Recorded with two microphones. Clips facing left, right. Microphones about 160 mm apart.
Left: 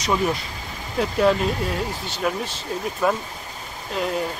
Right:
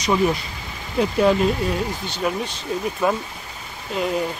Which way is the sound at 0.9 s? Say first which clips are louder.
Right 2 dB; centre (ahead or behind).